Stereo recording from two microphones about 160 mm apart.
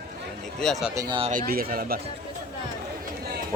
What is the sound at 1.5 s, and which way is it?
Speech, 65° right (ahead or behind).